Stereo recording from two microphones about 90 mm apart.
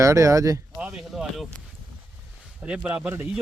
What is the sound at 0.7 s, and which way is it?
Speech, 10° right (ahead or behind).